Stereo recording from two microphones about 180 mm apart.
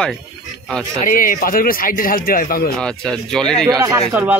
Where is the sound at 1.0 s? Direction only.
50° left (ahead or behind).